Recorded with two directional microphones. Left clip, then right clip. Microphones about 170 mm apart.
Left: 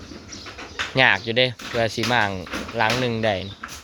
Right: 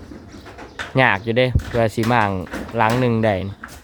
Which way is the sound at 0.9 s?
25° right (ahead or behind).